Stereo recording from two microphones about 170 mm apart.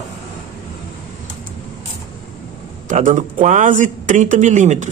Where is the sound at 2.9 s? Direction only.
50° right (ahead or behind).